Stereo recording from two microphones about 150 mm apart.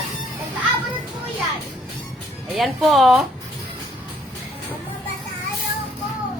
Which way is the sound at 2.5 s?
Centre (ahead or behind).